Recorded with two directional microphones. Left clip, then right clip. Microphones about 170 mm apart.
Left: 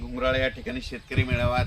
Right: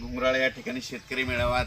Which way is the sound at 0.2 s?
25° right (ahead or behind).